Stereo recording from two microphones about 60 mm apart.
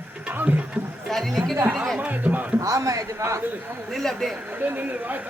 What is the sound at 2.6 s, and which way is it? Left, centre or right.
Speech, right.